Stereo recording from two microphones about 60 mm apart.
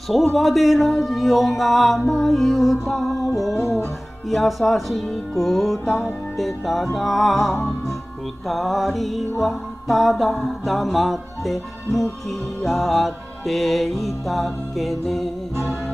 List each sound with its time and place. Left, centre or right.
0.1 s music: centre
4.3 s music: centre